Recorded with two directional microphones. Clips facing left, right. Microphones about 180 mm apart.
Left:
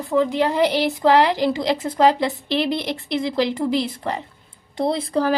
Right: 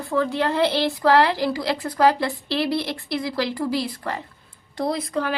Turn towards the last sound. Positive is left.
turn(degrees=35)  # may be behind; listen again after turning